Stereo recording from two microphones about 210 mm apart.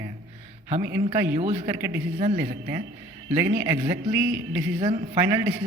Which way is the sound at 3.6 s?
10° right (ahead or behind).